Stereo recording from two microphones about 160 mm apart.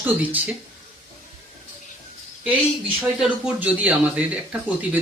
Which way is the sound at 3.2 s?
10° right (ahead or behind).